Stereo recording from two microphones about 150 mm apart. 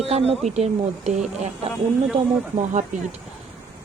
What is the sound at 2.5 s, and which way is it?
Speech, 55° right (ahead or behind).